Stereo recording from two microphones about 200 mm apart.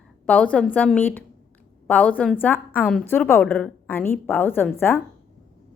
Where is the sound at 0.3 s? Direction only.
5° left (ahead or behind).